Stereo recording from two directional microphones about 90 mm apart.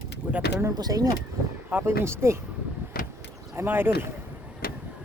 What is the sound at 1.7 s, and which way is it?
Speech, 25° right (ahead or behind).